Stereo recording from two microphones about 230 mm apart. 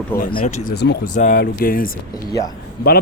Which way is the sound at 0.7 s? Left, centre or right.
Left.